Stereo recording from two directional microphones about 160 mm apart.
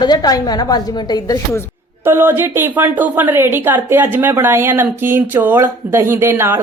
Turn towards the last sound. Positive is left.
turn(degrees=-15)  # may be behind; listen again after turning